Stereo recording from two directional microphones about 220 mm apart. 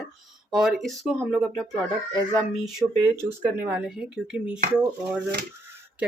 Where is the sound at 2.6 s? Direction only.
5° right (ahead or behind).